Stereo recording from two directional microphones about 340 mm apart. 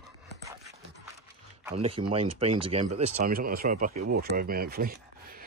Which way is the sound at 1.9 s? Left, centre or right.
Centre.